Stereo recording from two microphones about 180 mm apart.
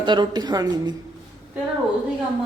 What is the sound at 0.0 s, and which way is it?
Speech, 25° right (ahead or behind).